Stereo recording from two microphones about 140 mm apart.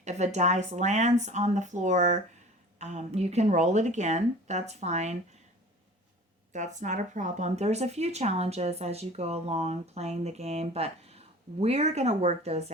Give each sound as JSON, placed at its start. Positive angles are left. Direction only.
{"t": 0.0, "sound": "speech", "side_deg": -55}
{"t": 6.5, "sound": "speech", "side_deg": -60}